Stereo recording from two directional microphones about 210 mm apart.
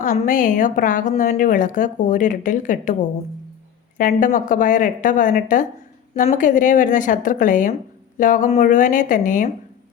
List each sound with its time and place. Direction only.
0.0 s a woman's voice: 40° left (ahead or behind)